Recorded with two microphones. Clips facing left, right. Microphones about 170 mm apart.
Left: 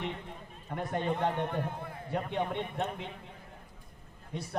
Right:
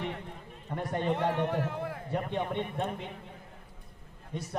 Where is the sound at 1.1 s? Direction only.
80° right.